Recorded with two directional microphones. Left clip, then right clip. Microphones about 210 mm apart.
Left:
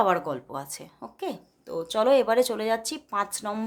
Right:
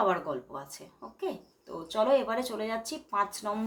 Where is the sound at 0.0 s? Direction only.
50° left (ahead or behind).